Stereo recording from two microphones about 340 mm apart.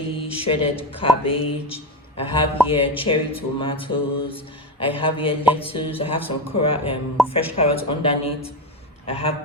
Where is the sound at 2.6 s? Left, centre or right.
Centre.